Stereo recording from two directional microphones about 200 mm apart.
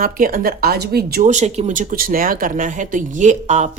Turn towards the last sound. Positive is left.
turn(degrees=-35)  # may be behind; listen again after turning